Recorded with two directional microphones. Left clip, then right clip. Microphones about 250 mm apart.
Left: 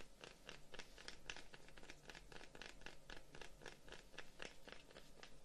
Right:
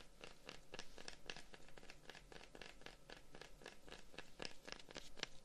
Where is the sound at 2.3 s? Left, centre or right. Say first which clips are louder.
Even; centre.